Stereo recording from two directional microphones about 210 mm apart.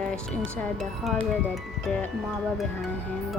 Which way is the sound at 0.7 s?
Centre (ahead or behind).